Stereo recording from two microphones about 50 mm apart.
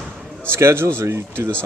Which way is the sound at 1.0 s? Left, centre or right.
Right.